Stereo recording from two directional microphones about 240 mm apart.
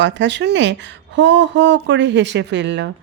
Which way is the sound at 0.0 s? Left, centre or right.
Right.